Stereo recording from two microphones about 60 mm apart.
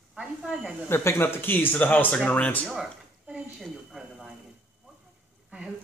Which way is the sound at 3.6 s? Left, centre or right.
Centre.